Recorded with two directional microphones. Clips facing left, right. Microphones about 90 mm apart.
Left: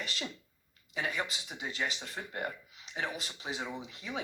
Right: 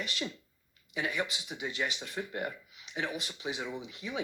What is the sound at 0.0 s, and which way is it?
Speech, 35° left (ahead or behind).